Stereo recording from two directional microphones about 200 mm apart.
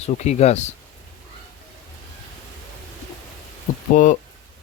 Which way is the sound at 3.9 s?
40° left (ahead or behind).